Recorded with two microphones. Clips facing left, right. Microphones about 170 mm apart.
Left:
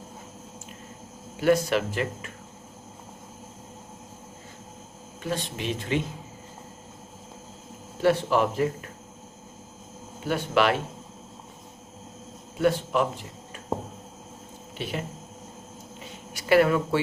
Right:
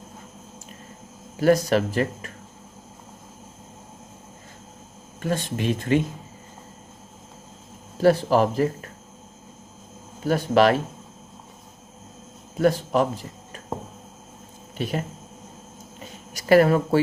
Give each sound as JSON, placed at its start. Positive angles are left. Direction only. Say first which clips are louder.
{"t": 1.4, "sound": "speech", "louder": "right 3 dB", "side_deg": -40}
{"t": 5.2, "sound": "speech", "louder": "right 5 dB", "side_deg": -50}
{"t": 8.0, "sound": "speech", "louder": "right 4 dB", "side_deg": -40}
{"t": 10.2, "sound": "speech", "louder": "right 5 dB", "side_deg": -40}
{"t": 12.5, "sound": "speech", "louder": "right 3 dB", "side_deg": -40}
{"t": 14.8, "sound": "speech", "louder": "right 5 dB", "side_deg": -45}
{"t": 16.3, "sound": "speech", "louder": "right 4 dB", "side_deg": -40}